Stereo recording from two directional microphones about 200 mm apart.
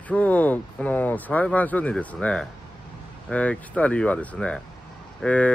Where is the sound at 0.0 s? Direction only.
5° left (ahead or behind).